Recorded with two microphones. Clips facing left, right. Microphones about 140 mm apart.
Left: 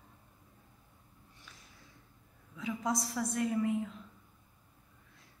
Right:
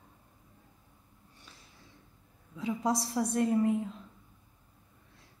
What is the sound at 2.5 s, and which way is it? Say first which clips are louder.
A woman's voice: right 4 dB; 30° right (ahead or behind).